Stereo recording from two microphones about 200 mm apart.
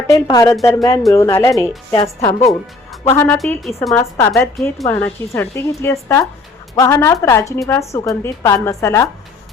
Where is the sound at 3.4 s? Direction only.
10° left (ahead or behind).